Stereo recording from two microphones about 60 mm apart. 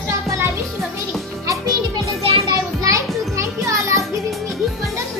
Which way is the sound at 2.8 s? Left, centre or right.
Right.